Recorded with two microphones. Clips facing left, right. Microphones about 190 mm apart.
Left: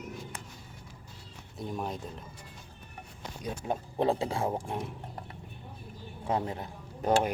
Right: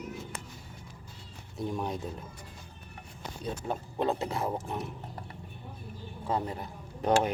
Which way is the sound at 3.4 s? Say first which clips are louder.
Left 1 dB; 15° left (ahead or behind).